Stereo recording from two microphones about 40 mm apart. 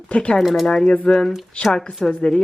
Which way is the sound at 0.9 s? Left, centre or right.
Left.